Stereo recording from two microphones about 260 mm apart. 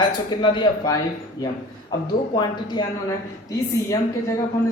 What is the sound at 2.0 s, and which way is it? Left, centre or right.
A man's voice, centre.